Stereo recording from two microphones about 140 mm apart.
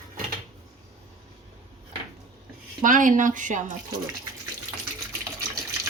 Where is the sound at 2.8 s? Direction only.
70° right (ahead or behind).